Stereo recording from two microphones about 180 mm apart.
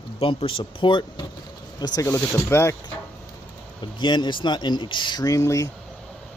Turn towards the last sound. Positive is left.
turn(degrees=20)  # may be behind; listen again after turning